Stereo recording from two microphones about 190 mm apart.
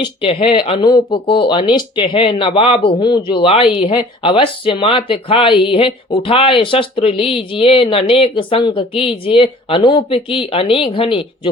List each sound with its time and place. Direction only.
0.0 s speech: 30° left (ahead or behind)